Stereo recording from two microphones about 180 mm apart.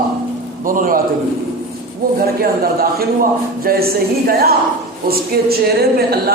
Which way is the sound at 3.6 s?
55° right (ahead or behind).